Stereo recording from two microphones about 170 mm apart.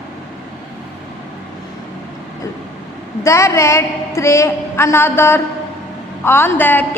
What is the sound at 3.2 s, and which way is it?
A woman's voice, 15° left (ahead or behind).